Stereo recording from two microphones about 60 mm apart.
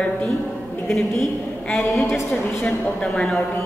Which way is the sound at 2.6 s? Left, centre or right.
Centre.